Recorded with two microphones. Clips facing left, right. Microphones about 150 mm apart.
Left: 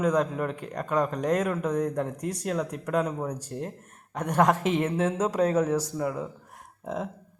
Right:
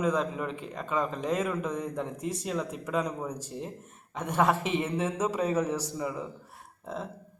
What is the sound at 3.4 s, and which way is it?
Speech, 5° right (ahead or behind).